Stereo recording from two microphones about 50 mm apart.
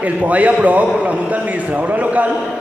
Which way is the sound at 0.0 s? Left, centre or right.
Right.